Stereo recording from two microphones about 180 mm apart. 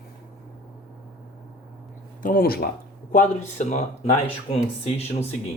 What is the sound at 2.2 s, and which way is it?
Speech, 50° left (ahead or behind).